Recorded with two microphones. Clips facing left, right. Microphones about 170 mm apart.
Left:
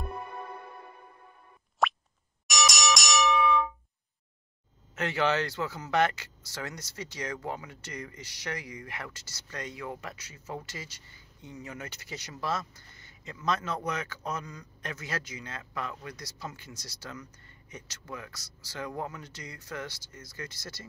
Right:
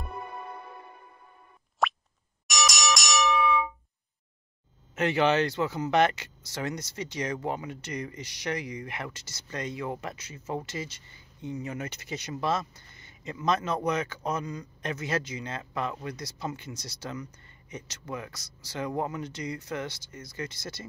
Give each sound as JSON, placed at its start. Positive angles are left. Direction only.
{"t": 1.8, "sound": "plop", "side_deg": 0}
{"t": 2.4, "sound": "music", "side_deg": 0}
{"t": 4.9, "sound": "speech", "side_deg": -20}